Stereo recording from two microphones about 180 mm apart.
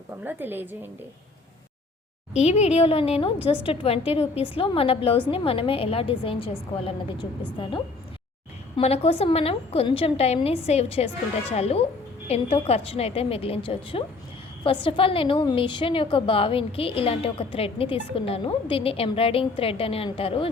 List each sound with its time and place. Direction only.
0.3 s a woman's voice: 10° right (ahead or behind)
2.3 s a woman's voice: 40° left (ahead or behind)
3.3 s a woman's voice: 10° right (ahead or behind)
3.7 s a woman's voice: 35° left (ahead or behind)
8.7 s a woman's voice: 35° left (ahead or behind)